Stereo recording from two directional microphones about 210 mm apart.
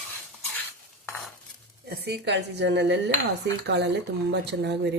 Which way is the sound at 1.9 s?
50° right (ahead or behind).